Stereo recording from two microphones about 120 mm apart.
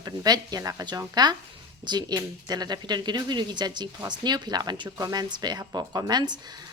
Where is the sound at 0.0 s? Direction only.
30° right (ahead or behind).